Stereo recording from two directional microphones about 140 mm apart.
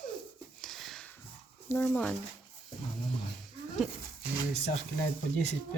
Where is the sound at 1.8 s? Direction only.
5° left (ahead or behind).